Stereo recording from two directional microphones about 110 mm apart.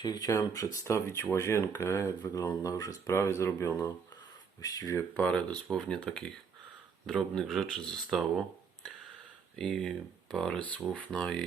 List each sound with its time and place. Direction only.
0.0 s speech: 35° left (ahead or behind)
5.7 s speech: 5° left (ahead or behind)